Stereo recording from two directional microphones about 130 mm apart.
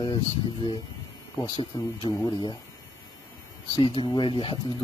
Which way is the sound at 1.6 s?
40° left (ahead or behind).